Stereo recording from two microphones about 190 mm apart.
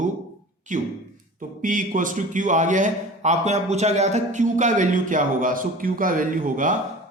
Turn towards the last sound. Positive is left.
turn(degrees=-45)  # may be behind; listen again after turning